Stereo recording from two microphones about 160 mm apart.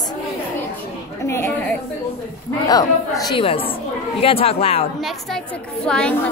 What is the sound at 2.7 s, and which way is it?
Speech, 25° left (ahead or behind).